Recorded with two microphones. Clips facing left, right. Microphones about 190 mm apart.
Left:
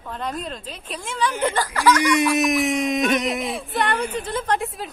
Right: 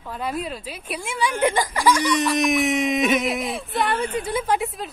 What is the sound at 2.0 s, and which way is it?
A woman's voice, 10° left (ahead or behind).